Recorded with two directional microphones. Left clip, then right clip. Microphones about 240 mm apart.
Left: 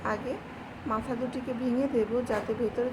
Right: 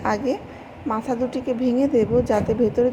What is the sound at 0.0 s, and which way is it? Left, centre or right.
Speech, centre.